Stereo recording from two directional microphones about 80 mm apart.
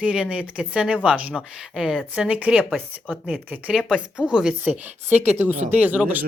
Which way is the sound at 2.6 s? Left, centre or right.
Centre.